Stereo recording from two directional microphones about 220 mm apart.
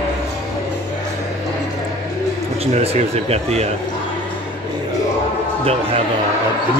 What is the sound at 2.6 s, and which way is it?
Speech, 30° right (ahead or behind).